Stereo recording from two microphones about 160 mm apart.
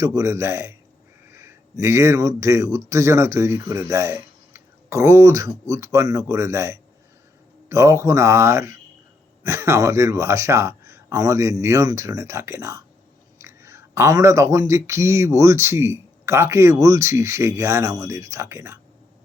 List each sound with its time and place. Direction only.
0.0 s speech: 20° right (ahead or behind)